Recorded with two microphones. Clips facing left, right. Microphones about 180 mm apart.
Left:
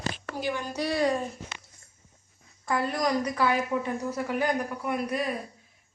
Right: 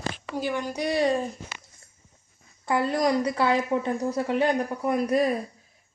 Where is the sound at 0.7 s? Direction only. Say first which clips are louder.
Right 2 dB; 20° right (ahead or behind).